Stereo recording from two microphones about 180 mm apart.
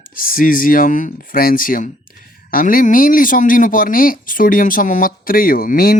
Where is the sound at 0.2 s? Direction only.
50° left (ahead or behind).